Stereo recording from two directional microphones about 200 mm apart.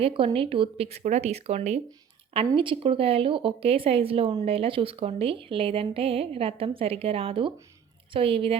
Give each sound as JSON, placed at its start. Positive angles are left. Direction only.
{"t": 0.0, "sound": "speech", "side_deg": -25}